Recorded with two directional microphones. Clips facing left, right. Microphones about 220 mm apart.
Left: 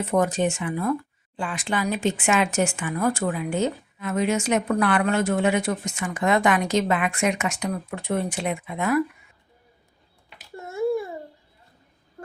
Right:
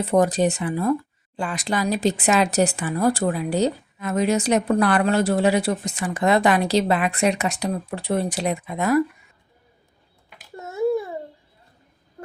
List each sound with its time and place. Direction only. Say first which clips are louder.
0.0 s speech: right 3 dB; 35° right (ahead or behind)